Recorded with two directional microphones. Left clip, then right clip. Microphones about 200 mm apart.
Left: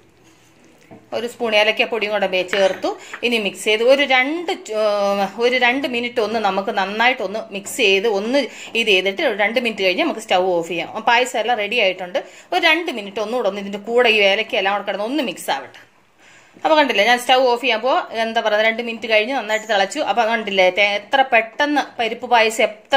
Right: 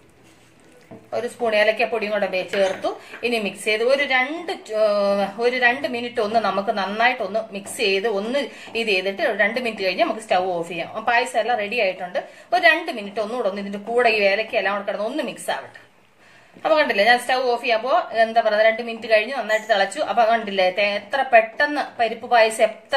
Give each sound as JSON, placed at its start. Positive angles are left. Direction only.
{"t": 1.1, "sound": "a woman's voice", "side_deg": 50}
{"t": 16.6, "sound": "a woman's voice", "side_deg": 50}